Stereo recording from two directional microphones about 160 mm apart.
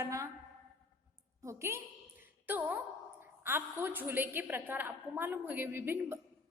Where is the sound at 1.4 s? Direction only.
15° right (ahead or behind).